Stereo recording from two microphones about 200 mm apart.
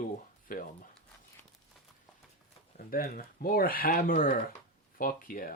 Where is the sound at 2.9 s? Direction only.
45° left (ahead or behind).